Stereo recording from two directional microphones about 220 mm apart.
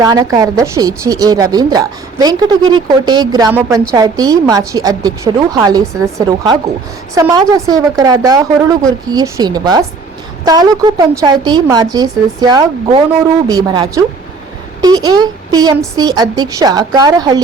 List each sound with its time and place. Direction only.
0.0 s a woman's voice: 15° right (ahead or behind)